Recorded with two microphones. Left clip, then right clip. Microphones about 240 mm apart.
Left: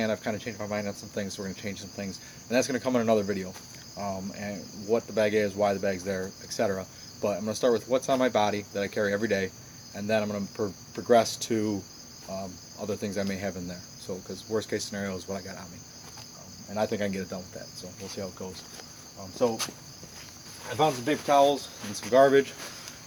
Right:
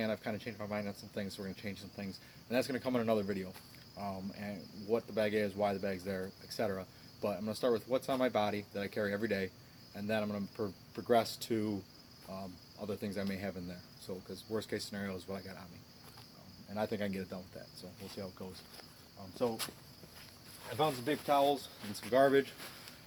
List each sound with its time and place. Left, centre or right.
0.0 s speech: centre
16.7 s speech: centre